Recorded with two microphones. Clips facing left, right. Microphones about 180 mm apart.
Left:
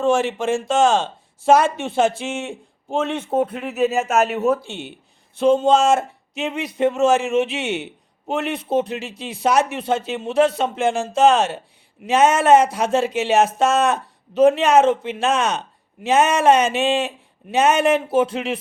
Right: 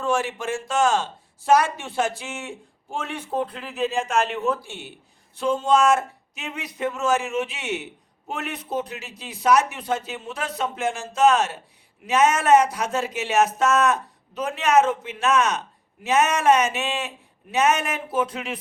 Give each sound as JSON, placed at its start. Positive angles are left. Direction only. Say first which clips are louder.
{"t": 0.0, "sound": "speech", "louder": "left 6 dB", "side_deg": 25}
{"t": 3.4, "sound": "speech", "louder": "left 6 dB", "side_deg": 5}
{"t": 4.6, "sound": "speech", "louder": "left 6 dB", "side_deg": 25}